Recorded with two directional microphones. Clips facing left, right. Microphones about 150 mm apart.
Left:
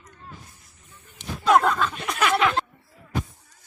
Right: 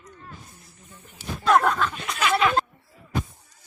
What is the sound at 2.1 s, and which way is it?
Chuckle, 55° left (ahead or behind).